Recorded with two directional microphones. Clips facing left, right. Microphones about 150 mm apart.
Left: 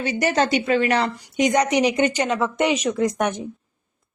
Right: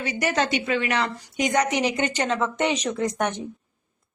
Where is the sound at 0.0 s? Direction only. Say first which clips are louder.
Left 4 dB; 30° left (ahead or behind).